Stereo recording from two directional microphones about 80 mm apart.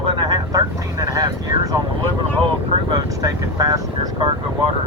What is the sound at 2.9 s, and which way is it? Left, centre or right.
Vehicle, right.